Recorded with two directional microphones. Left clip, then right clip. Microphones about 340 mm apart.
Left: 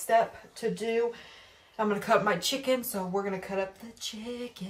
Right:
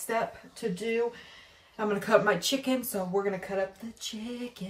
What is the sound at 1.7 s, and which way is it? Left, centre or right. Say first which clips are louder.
Speech: right 1 dB; centre.